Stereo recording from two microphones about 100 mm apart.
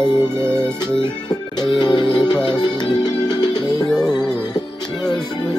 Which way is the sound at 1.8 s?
50° left (ahead or behind).